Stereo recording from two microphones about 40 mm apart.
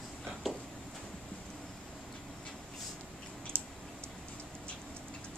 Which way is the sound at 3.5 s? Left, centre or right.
Right.